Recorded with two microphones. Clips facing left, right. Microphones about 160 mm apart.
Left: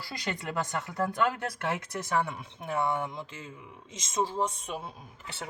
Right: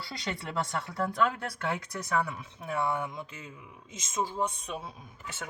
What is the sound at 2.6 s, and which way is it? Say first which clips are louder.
Speech: left 1 dB; 30° left (ahead or behind).